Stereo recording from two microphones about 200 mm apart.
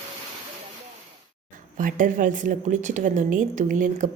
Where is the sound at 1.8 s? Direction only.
40° right (ahead or behind).